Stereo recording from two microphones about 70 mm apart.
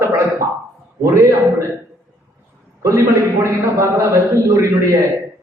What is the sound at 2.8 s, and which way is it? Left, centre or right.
Speech, right.